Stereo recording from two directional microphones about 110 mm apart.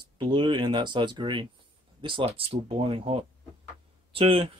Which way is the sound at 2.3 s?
60° right (ahead or behind).